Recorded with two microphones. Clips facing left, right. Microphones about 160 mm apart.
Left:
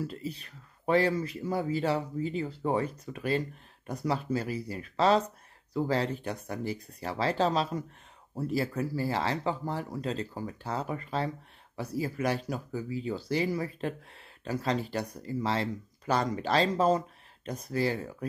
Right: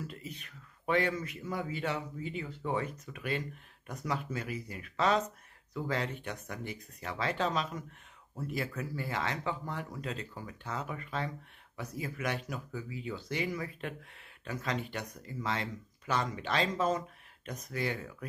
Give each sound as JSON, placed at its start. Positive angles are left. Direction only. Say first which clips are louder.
{"t": 0.0, "sound": "speech", "louder": "left 7 dB", "side_deg": 30}